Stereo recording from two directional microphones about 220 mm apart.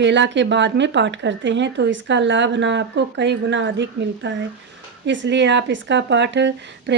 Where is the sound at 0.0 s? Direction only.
55° right (ahead or behind).